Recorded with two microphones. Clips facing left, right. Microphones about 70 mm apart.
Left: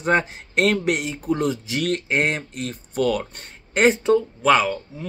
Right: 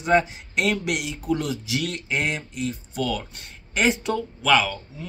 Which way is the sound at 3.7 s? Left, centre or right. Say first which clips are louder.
Left 6 dB; left.